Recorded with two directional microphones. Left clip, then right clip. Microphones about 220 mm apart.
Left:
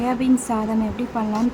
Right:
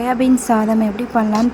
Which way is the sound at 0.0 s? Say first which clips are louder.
Right 6 dB; 20° right (ahead or behind).